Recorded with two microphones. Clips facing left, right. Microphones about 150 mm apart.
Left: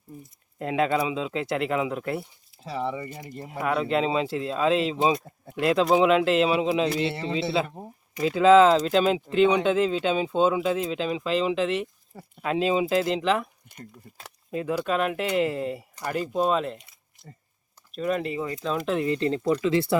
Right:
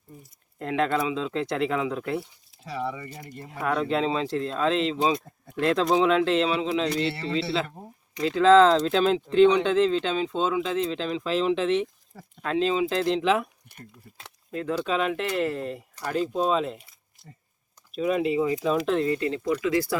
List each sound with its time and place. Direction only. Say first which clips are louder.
0.6 s speech: left 1 dB; 10° left (ahead or behind)
2.6 s speech: left 2 dB; 25° left (ahead or behind)
3.6 s speech: left 1 dB; 5° left (ahead or behind)
14.5 s speech: left 1 dB; 10° left (ahead or behind)
17.9 s speech: right 3 dB; 5° right (ahead or behind)
19.0 s speech: left 2 dB; 25° left (ahead or behind)